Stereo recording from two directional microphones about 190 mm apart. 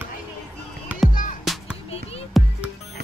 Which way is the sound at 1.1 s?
45° left (ahead or behind).